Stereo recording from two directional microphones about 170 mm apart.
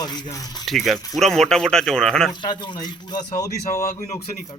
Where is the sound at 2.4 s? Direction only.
25° left (ahead or behind).